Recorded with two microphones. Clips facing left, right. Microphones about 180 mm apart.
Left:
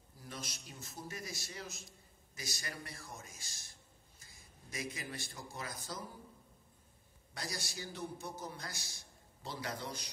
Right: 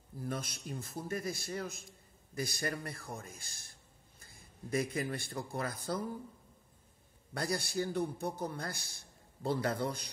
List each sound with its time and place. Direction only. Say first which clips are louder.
0.2 s a man's voice: right 9 dB; 55° right (ahead or behind)
7.3 s a man's voice: right 10 dB; 55° right (ahead or behind)